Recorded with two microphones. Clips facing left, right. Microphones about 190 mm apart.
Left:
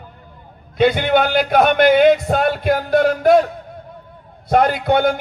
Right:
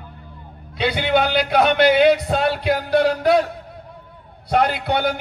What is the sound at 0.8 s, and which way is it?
A man's voice, 45° left (ahead or behind).